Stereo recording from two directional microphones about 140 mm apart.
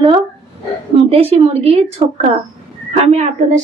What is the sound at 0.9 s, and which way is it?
A woman's voice, 45° right (ahead or behind).